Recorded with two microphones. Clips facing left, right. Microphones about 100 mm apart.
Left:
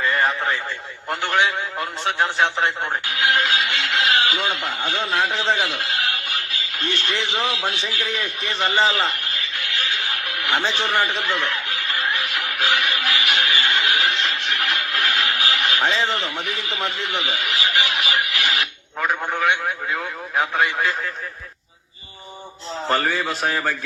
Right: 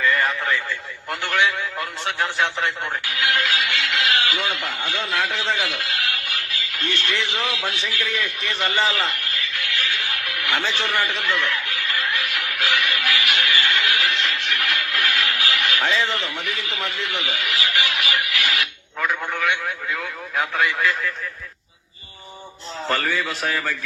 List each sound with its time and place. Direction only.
0.0 s radio: 30° left (ahead or behind)
22.9 s a man's voice: 30° left (ahead or behind)